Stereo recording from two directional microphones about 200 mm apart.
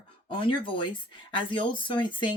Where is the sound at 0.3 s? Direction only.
25° left (ahead or behind).